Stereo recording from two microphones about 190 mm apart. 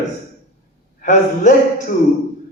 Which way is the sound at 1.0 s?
40° left (ahead or behind).